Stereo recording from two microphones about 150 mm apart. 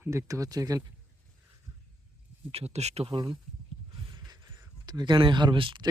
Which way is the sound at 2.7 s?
45° right (ahead or behind).